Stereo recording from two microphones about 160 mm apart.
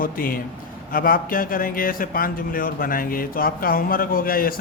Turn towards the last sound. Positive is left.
turn(degrees=65)  # may be behind; listen again after turning